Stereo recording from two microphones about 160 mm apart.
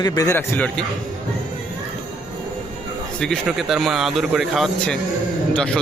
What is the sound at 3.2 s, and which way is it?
A man's voice, 5° left (ahead or behind).